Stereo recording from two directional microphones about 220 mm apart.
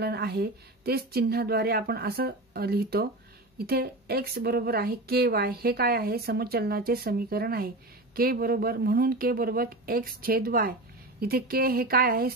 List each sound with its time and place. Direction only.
0.0 s a woman's voice: 45° right (ahead or behind)